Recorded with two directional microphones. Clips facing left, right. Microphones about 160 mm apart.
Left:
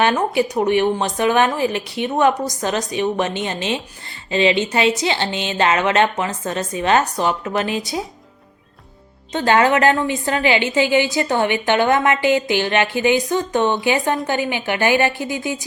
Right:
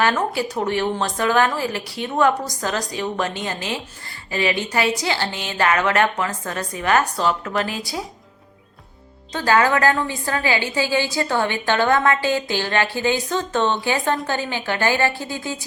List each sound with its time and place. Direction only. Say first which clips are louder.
0.0 s a woman's voice: left 3 dB; 20° left (ahead or behind)
9.3 s a woman's voice: left 3 dB; 25° left (ahead or behind)